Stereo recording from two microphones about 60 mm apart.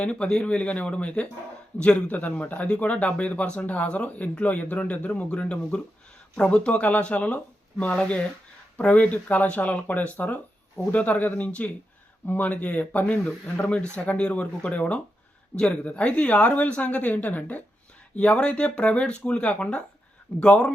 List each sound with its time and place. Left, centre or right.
0.0 s speech: centre